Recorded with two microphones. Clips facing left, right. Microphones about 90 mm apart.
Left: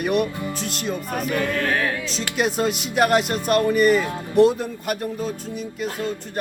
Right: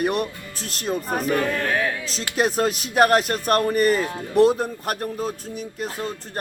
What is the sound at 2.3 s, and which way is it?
Speech, 40° right (ahead or behind).